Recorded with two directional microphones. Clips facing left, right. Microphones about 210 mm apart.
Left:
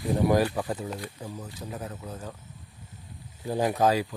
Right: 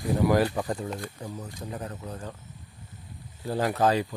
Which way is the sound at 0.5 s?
5° left (ahead or behind).